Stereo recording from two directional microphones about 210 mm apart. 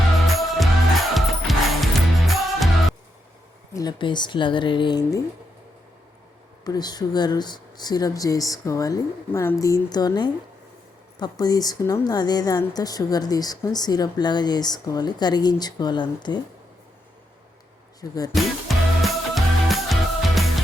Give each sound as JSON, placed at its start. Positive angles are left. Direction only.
{"t": 0.3, "sound": "music", "side_deg": 0}
{"t": 3.8, "sound": "a woman's voice", "side_deg": 20}
{"t": 6.7, "sound": "a woman's voice", "side_deg": 20}
{"t": 18.0, "sound": "speech", "side_deg": 15}
{"t": 18.3, "sound": "music", "side_deg": 0}